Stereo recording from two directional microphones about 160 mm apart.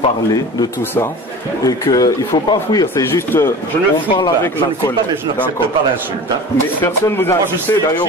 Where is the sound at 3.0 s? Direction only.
15° left (ahead or behind).